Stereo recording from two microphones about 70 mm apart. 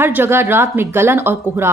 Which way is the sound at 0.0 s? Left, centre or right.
Right.